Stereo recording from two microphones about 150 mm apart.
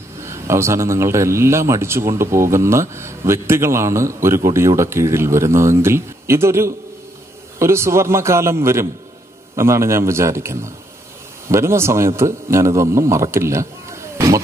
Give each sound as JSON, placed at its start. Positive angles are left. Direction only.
{"t": 0.2, "sound": "a man's voice", "side_deg": -20}